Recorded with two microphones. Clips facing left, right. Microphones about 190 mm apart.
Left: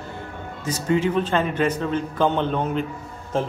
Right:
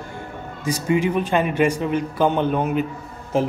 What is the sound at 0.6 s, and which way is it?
A man's voice, 10° right (ahead or behind).